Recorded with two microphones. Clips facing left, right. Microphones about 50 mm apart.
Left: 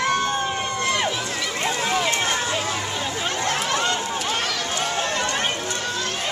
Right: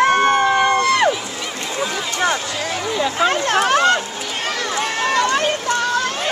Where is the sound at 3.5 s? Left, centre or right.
Right.